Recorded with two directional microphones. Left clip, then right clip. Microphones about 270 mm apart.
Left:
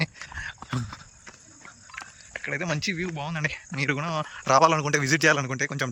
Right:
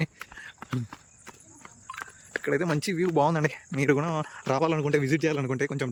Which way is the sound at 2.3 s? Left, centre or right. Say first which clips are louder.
Right 3 dB; centre.